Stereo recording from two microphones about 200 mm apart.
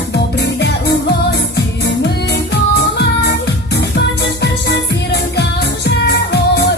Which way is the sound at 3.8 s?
60° left (ahead or behind).